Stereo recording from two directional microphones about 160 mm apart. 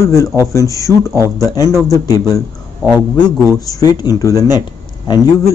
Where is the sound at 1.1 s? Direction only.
20° right (ahead or behind).